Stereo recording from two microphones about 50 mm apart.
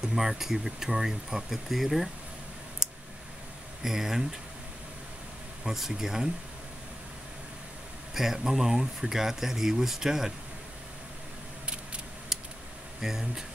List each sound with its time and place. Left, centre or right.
0.0 s speech: centre
3.8 s speech: centre
5.6 s speech: centre
8.1 s speech: centre
11.6 s a sound: right
12.3 s a sound: centre
13.0 s speech: centre